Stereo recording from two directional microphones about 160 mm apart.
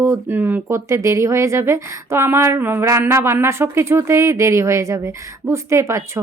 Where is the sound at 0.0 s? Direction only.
15° right (ahead or behind).